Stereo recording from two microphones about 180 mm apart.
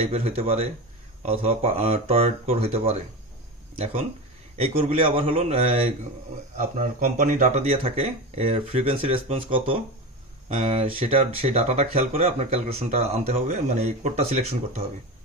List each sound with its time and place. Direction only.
0.1 s speech: 35° right (ahead or behind)
4.5 s speech: 35° right (ahead or behind)
6.6 s speech: 45° right (ahead or behind)